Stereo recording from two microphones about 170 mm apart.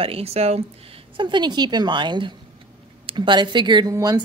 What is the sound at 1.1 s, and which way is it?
A woman's voice, 25° right (ahead or behind).